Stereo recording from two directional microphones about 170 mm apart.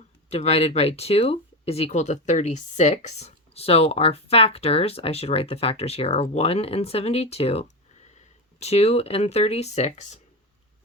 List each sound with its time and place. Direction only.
0.3 s speech: 35° left (ahead or behind)